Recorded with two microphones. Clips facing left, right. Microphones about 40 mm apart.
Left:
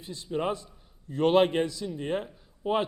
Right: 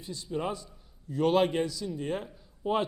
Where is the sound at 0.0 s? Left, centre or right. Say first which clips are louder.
Left 3 dB; left.